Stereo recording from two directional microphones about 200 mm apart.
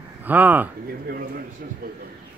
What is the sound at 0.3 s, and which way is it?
Speech, 10° right (ahead or behind).